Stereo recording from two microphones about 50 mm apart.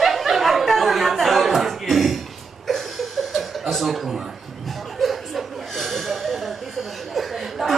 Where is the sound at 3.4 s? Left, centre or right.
Centre.